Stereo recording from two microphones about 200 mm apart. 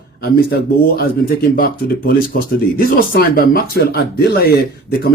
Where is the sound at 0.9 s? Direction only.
45° left (ahead or behind).